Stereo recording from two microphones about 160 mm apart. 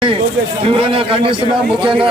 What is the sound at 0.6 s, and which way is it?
Speech, 35° right (ahead or behind).